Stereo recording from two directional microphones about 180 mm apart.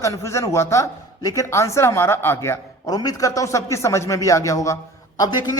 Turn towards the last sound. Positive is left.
turn(degrees=20)  # may be behind; listen again after turning